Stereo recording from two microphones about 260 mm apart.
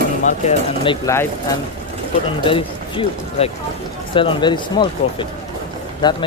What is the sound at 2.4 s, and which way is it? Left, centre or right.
Speech, centre.